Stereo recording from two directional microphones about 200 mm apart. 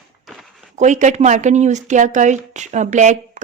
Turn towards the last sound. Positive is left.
turn(degrees=-35)  # may be behind; listen again after turning